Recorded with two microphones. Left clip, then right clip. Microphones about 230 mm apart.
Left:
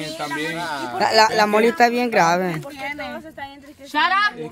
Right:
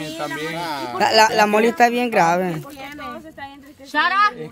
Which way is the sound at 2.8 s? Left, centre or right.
Left.